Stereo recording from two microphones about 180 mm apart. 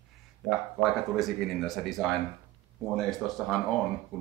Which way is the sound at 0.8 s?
Centre (ahead or behind).